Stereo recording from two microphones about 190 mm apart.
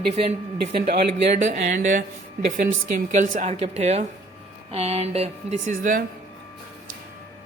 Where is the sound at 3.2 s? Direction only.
40° right (ahead or behind).